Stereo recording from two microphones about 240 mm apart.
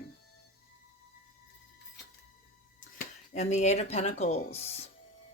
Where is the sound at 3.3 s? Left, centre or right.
Left.